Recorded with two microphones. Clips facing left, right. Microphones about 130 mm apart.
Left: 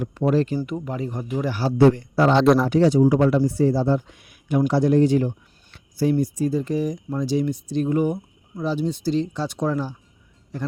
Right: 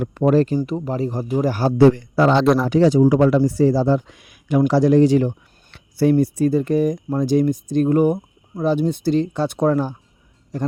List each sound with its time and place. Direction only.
0.0 s speech: 55° right (ahead or behind)
0.4 s speech: 35° right (ahead or behind)
1.8 s speech: 90° right
2.3 s speech: centre (ahead or behind)
2.8 s speech: 90° right
5.7 s speech: 65° right (ahead or behind)